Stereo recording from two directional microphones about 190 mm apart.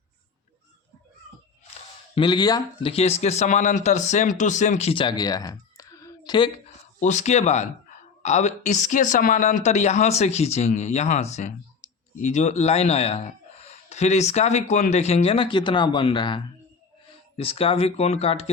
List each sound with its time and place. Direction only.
2.1 s a man's voice: 25° left (ahead or behind)
7.0 s a man's voice: 35° left (ahead or behind)